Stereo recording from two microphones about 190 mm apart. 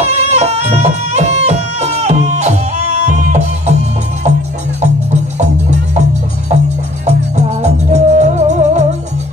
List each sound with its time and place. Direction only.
0.0 s music: 35° right (ahead or behind)
4.8 s music: 35° right (ahead or behind)
7.1 s music: 35° right (ahead or behind)